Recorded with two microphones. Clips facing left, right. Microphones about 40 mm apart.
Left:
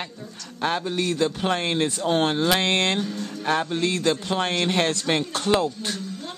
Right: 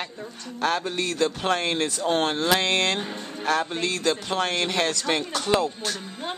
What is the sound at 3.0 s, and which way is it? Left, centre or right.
Speech, right.